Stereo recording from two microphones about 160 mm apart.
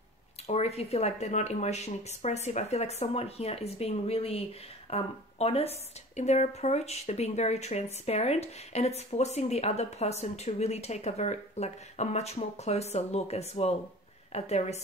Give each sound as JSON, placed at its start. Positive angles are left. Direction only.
{"t": 0.5, "sound": "speech", "side_deg": 40}